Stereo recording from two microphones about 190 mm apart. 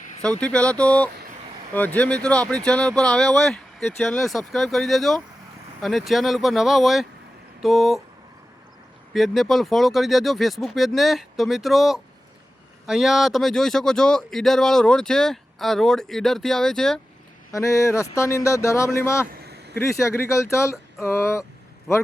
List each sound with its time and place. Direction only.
0.2 s speech: 5° left (ahead or behind)
9.1 s speech: centre (ahead or behind)
17.5 s speech: 15° left (ahead or behind)